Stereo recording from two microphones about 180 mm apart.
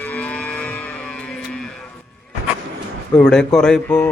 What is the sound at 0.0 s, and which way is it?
Cattle, 10° left (ahead or behind).